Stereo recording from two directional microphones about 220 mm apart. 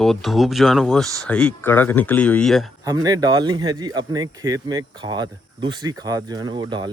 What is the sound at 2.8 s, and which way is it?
Speech, 15° right (ahead or behind).